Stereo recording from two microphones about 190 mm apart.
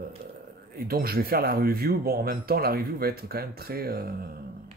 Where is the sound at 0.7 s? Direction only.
50° right (ahead or behind).